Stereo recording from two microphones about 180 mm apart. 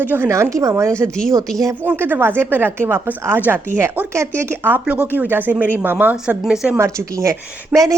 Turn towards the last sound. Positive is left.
turn(degrees=-20)  # may be behind; listen again after turning